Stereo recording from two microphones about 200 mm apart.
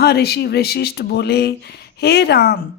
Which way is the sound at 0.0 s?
50° left (ahead or behind).